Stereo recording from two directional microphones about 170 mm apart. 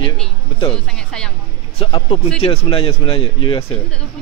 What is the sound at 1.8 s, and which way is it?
Speech, 35° left (ahead or behind).